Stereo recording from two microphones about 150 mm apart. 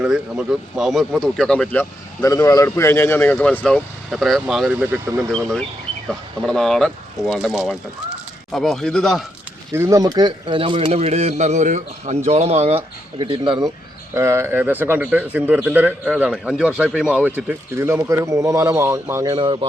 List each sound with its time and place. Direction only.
0.0 s speech: 5° right (ahead or behind)
5.3 s speech: 5° left (ahead or behind)
9.7 s speech: 20° right (ahead or behind); by 12.8 s 45° right (ahead or behind)
13.1 s speech: 35° right (ahead or behind)
14.1 s speech: 15° right (ahead or behind)
19.2 s speech: 30° right (ahead or behind)